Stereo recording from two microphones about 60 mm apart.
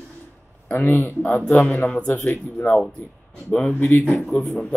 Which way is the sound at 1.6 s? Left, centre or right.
Centre.